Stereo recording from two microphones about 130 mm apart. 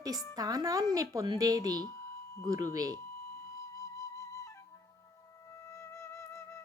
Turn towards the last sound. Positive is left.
turn(degrees=25)  # may be behind; listen again after turning